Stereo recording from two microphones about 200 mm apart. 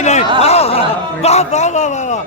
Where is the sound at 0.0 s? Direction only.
35° left (ahead or behind).